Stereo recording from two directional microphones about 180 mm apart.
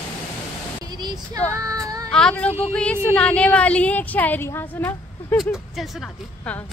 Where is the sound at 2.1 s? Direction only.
5° left (ahead or behind).